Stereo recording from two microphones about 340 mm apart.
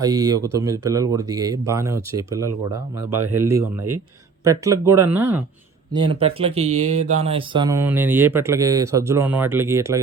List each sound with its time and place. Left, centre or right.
0.0 s speech: centre
6.7 s speech: right
7.2 s speech: centre